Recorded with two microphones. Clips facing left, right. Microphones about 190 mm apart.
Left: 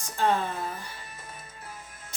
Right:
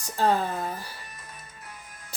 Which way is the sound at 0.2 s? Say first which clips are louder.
Right 2 dB; 35° right (ahead or behind).